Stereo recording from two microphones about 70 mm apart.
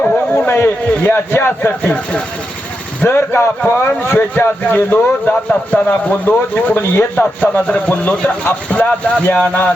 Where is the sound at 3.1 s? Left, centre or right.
Left.